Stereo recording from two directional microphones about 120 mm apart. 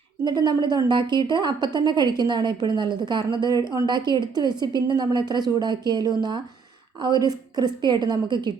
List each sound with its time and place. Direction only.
0.3 s a woman's voice: 40° right (ahead or behind)